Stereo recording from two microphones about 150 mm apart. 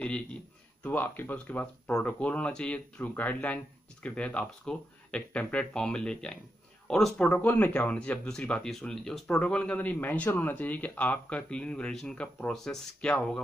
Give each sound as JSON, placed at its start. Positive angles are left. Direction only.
{"t": 0.0, "sound": "speech", "side_deg": 5}